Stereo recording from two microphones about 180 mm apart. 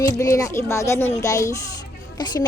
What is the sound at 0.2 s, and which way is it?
Speech, 15° left (ahead or behind).